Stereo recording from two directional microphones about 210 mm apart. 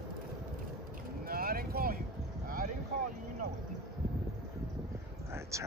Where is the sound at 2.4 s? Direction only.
40° right (ahead or behind).